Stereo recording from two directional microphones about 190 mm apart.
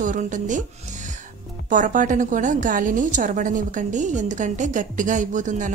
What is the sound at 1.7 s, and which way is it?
A woman's voice, 45° right (ahead or behind).